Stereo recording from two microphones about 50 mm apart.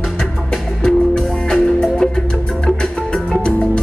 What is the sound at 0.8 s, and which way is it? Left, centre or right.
Music, centre.